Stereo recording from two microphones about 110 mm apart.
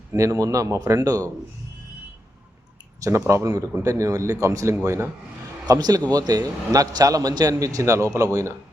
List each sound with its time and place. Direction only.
0.1 s speech: 30° right (ahead or behind)
3.0 s a man's voice: 25° right (ahead or behind)